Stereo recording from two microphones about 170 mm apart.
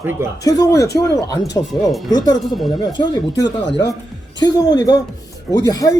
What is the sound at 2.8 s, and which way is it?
Speech, 25° left (ahead or behind).